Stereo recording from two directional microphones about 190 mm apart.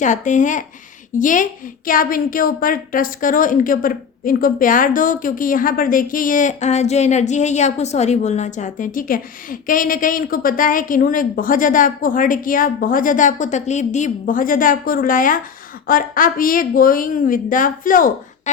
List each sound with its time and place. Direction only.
0.0 s a woman's voice: 40° left (ahead or behind)